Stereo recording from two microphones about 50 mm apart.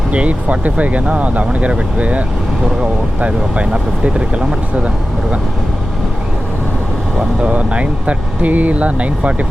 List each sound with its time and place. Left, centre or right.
0.1 s speech: right
7.2 s speech: right